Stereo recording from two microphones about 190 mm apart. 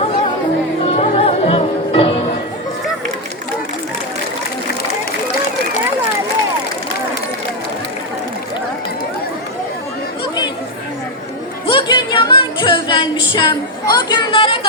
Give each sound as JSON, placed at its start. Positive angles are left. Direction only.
{"t": 0.9, "sound": "music", "side_deg": 30}
{"t": 11.7, "sound": "music", "side_deg": 25}
{"t": 13.9, "sound": "a sound", "side_deg": 25}